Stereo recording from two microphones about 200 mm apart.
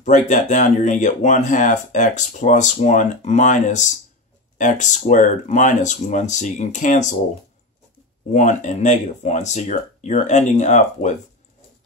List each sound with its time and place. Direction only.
0.0 s speech: 40° left (ahead or behind)
8.3 s speech: 35° left (ahead or behind)